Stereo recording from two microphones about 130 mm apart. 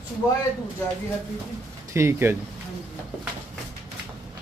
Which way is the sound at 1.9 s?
20° right (ahead or behind).